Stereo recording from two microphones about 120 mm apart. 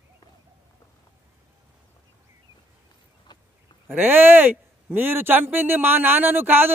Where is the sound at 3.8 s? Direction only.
15° right (ahead or behind).